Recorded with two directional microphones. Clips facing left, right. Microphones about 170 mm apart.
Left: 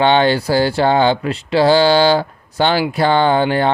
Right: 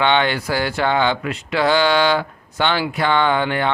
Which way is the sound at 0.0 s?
35° left (ahead or behind).